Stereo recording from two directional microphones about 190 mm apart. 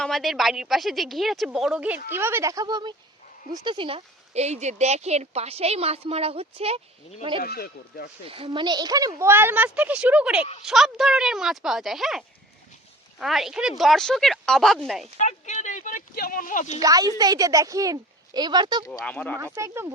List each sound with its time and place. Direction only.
0.0 s a woman's voice: centre (ahead or behind); by 6.8 s 30° right (ahead or behind)
7.4 s speech: 55° left (ahead or behind)
8.3 s a woman's voice: 30° right (ahead or behind); by 15.1 s centre (ahead or behind)
15.2 s speech: 40° left (ahead or behind)
16.8 s a woman's voice: 20° right (ahead or behind)
18.9 s speech: 5° left (ahead or behind)
19.5 s a woman's voice: 15° right (ahead or behind)